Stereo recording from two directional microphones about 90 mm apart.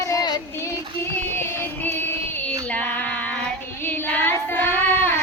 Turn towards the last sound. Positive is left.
turn(degrees=20)  # may be behind; listen again after turning